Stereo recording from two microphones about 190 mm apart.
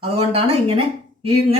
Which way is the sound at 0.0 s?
30° right (ahead or behind).